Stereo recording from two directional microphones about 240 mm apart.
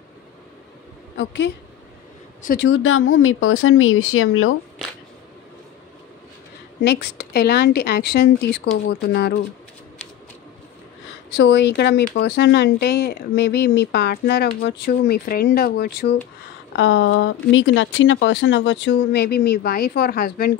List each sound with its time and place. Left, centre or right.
1.1 s a woman's voice: left
2.7 s speech: left
6.8 s speech: left
11.3 s speech: left
16.7 s speech: left